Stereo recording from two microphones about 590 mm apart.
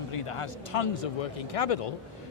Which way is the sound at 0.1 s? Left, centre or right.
Left.